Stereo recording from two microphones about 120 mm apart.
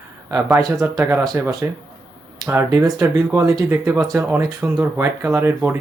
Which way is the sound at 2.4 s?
20° right (ahead or behind).